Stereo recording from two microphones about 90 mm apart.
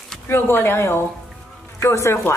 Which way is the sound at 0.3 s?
25° left (ahead or behind).